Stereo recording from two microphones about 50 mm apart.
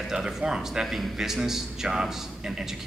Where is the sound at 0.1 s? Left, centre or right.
Centre.